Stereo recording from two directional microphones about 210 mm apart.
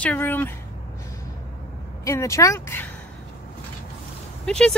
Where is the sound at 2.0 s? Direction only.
15° left (ahead or behind).